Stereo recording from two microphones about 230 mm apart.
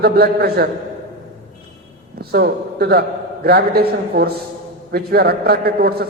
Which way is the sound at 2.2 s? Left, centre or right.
Right.